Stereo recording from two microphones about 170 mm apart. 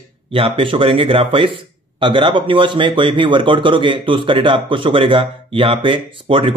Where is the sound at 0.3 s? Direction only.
30° right (ahead or behind).